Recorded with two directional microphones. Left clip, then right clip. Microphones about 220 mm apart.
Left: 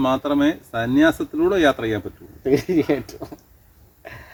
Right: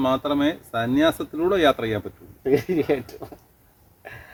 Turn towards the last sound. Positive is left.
turn(degrees=15)  # may be behind; listen again after turning